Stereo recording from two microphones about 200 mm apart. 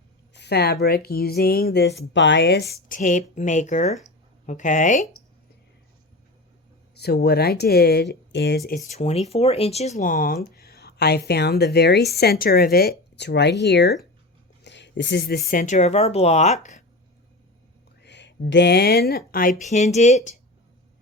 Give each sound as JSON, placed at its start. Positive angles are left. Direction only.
{"t": 0.3, "sound": "speech", "side_deg": 55}
{"t": 6.9, "sound": "speech", "side_deg": 55}
{"t": 8.9, "sound": "speech", "side_deg": 35}
{"t": 18.0, "sound": "speech", "side_deg": 60}
{"t": 19.6, "sound": "speech", "side_deg": 35}